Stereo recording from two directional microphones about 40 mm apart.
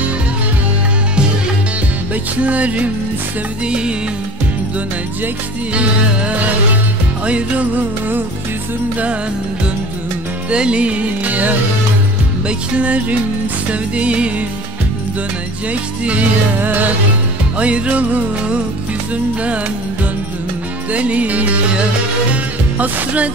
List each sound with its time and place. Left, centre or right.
2.3 s music: right
3.6 s music: right
5.8 s music: right
10.5 s music: right
15.7 s music: right
16.5 s music: right
17.6 s music: right
20.9 s music: right